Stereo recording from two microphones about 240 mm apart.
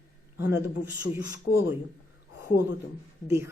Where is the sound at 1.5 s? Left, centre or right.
Left.